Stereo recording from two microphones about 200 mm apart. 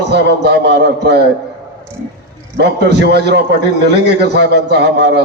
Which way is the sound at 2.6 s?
55° right (ahead or behind).